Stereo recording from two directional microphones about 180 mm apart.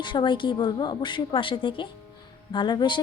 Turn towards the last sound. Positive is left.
turn(degrees=25)  # may be behind; listen again after turning